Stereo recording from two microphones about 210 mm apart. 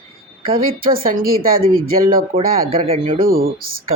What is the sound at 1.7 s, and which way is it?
Speech, 45° right (ahead or behind).